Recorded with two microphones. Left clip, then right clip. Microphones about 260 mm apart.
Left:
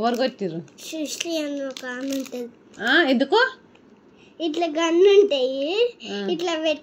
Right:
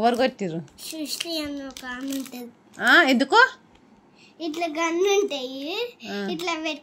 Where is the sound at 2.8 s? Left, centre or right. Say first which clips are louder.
Right 2 dB; right.